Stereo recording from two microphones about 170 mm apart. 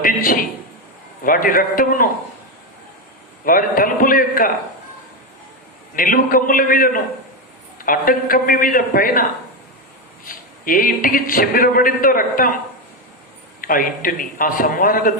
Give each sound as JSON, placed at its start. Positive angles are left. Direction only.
{"t": 1.2, "sound": "a man's voice", "side_deg": 55}
{"t": 3.4, "sound": "a man's voice", "side_deg": 55}
{"t": 6.0, "sound": "a man's voice", "side_deg": 55}
{"t": 10.2, "sound": "a man's voice", "side_deg": 55}
{"t": 13.6, "sound": "a man's voice", "side_deg": 55}